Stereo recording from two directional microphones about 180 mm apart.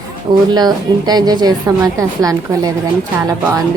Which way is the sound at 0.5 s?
20° right (ahead or behind).